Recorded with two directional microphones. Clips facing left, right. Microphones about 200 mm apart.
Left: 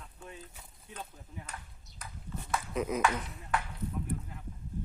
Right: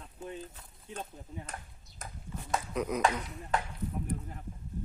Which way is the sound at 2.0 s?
45° right (ahead or behind).